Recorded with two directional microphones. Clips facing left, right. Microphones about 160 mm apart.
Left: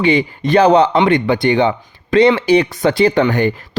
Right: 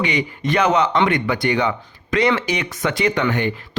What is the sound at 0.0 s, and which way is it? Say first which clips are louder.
Speech: left 7 dB; 30° left (ahead or behind).